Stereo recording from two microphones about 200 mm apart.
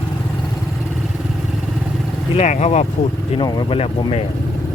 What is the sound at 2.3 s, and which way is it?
Speech, 35° left (ahead or behind).